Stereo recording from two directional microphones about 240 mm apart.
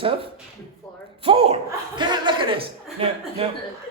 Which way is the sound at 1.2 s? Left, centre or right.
Right.